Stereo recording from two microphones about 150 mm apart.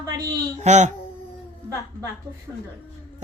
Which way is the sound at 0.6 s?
50° right (ahead or behind).